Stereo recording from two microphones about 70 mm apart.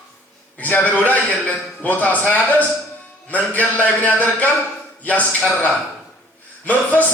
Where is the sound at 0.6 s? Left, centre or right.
Left.